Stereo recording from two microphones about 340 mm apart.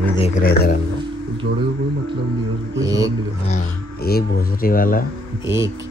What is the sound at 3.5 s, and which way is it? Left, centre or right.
Speech, left.